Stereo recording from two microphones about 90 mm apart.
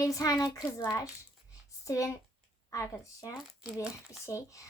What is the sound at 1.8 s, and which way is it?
Speech, 35° left (ahead or behind).